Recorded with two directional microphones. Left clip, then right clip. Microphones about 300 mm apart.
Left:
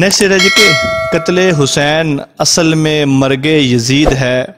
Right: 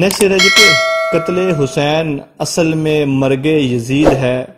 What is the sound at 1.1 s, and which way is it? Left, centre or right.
Speech, left.